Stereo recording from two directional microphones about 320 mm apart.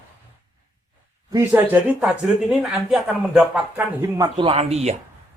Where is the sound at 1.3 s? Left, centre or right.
Centre.